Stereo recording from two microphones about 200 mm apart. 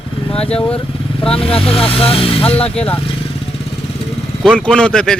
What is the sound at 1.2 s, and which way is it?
Speech, 30° left (ahead or behind).